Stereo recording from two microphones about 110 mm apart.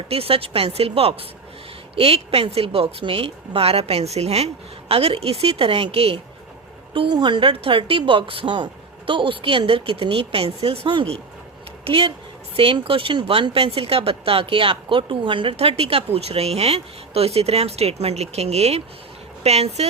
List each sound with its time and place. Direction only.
0.1 s speech: 60° right (ahead or behind)
6.9 s a woman's voice: 45° right (ahead or behind)
15.5 s speech: 65° right (ahead or behind)